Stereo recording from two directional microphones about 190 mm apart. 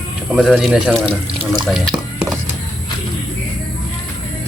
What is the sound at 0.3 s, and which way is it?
Speech, 5° right (ahead or behind).